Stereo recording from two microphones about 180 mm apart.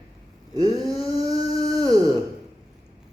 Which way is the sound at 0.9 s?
20° right (ahead or behind).